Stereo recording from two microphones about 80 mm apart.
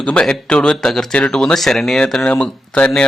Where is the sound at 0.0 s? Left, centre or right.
Centre.